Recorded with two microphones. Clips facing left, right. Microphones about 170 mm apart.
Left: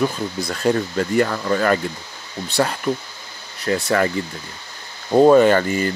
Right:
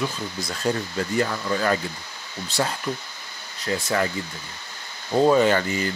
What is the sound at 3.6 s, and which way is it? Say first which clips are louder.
Speech: left 5 dB; 65° left (ahead or behind).